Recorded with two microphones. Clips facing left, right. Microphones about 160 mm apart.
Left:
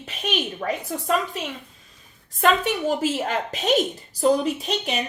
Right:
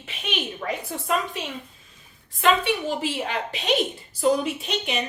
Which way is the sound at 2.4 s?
40° left (ahead or behind).